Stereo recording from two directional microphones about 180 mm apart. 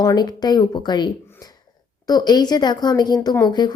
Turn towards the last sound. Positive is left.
turn(degrees=25)  # may be behind; listen again after turning